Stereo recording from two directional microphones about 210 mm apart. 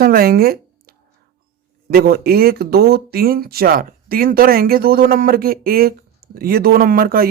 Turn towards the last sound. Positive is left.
turn(degrees=-45)  # may be behind; listen again after turning